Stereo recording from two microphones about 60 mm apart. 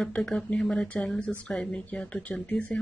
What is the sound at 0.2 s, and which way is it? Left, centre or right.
Speech, centre.